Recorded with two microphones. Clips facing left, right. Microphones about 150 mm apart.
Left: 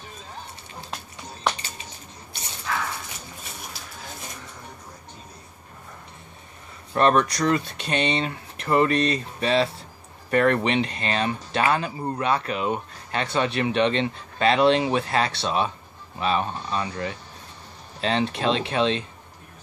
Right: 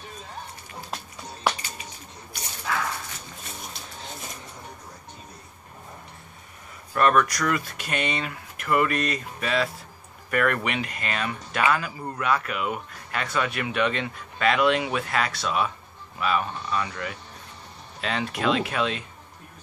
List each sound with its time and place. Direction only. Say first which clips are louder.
2.3 s dog: right 1 dB; 25° left (ahead or behind)
6.9 s speech: left 1 dB; 25° left (ahead or behind)